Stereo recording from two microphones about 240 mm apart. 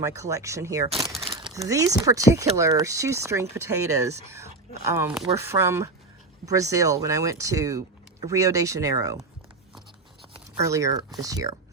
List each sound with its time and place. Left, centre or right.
0.0 s speech: centre
10.6 s speech: centre